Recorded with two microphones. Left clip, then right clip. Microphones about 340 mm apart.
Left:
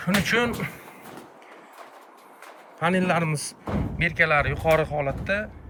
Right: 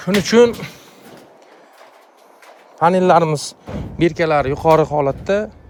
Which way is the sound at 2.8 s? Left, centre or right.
Right.